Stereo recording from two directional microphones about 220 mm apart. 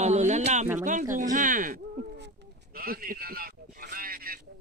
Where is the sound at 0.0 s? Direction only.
30° right (ahead or behind).